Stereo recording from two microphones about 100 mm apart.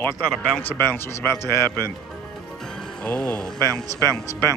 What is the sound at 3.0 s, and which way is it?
Speech, 10° left (ahead or behind).